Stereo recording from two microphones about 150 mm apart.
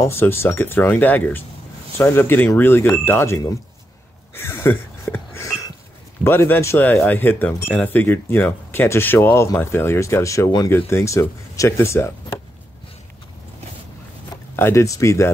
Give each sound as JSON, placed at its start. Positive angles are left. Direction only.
{"t": 0.0, "sound": "speech", "side_deg": 15}
{"t": 4.3, "sound": "music", "side_deg": 15}
{"t": 6.2, "sound": "speech", "side_deg": 15}
{"t": 14.3, "sound": "speech", "side_deg": 15}